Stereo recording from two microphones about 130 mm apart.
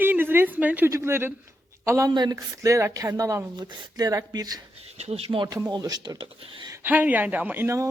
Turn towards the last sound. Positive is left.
turn(degrees=-20)  # may be behind; listen again after turning